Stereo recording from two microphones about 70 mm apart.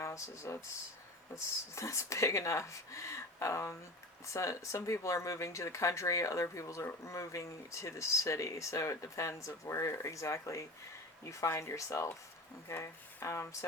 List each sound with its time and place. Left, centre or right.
0.0 s speech: left
1.7 s speech: left